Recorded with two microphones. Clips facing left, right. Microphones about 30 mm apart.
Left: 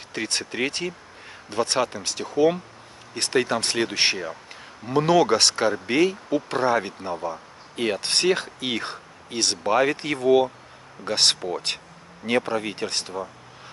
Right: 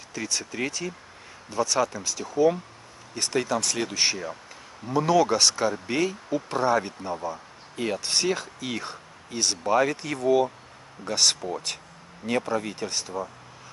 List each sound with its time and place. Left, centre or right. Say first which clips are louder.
0.1 s speech: left 3 dB; left
3.9 s speech: left 3 dB; left
9.7 s speech: left 2 dB; left